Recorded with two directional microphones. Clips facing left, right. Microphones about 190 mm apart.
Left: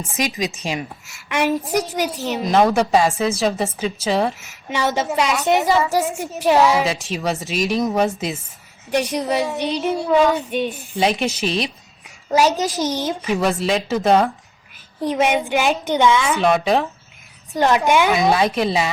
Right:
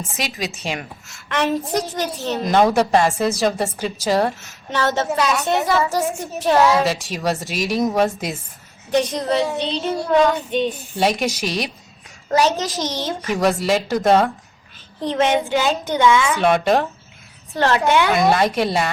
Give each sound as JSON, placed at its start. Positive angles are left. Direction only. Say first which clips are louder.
{"t": 0.3, "sound": "speech", "louder": "left 3 dB", "side_deg": 0}
{"t": 1.0, "sound": "a child's voice", "louder": "left 1 dB", "side_deg": 10}
{"t": 4.7, "sound": "a child's voice", "louder": "even", "side_deg": 15}
{"t": 8.9, "sound": "a child's voice", "louder": "right 1 dB", "side_deg": 10}
{"t": 9.9, "sound": "a child's voice", "louder": "even", "side_deg": 0}
{"t": 11.0, "sound": "speech", "louder": "even", "side_deg": -5}
{"t": 12.3, "sound": "a child's voice", "louder": "left 1 dB", "side_deg": 10}
{"t": 13.3, "sound": "a child's voice", "louder": "right 2 dB", "side_deg": 0}
{"t": 16.4, "sound": "speech", "louder": "even", "side_deg": 0}
{"t": 17.5, "sound": "a child's voice", "louder": "left 1 dB", "side_deg": 15}
{"t": 18.1, "sound": "speech", "louder": "even", "side_deg": 5}